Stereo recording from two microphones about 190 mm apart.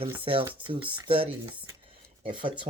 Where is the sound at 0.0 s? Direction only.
30° right (ahead or behind).